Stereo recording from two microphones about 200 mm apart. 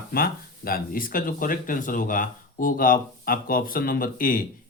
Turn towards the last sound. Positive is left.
turn(degrees=45)  # may be behind; listen again after turning